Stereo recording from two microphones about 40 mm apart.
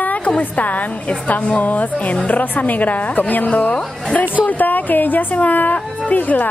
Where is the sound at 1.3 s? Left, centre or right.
Left.